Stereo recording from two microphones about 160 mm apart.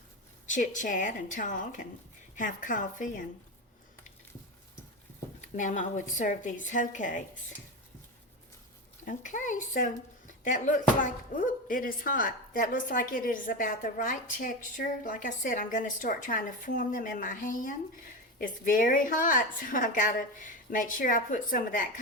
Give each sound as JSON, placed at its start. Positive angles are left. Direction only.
{"t": 0.4, "sound": "a woman's voice", "side_deg": 50}
{"t": 5.4, "sound": "a woman's voice", "side_deg": 50}
{"t": 9.0, "sound": "speech", "side_deg": 50}